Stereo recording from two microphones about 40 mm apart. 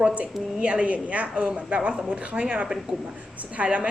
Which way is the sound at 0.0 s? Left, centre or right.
Right.